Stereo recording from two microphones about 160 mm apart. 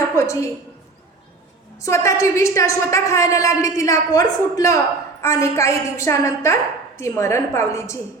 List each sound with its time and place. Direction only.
0.2 s a woman's voice: 20° left (ahead or behind)
1.8 s a woman's voice: 20° left (ahead or behind)